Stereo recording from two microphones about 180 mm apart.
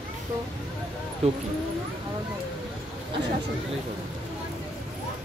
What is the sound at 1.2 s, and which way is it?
Speech, 35° right (ahead or behind).